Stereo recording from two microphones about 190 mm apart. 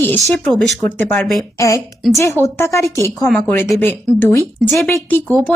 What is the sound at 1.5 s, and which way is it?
Speech, 15° left (ahead or behind).